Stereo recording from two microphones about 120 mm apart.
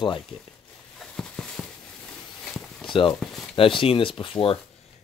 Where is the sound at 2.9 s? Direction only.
45° left (ahead or behind).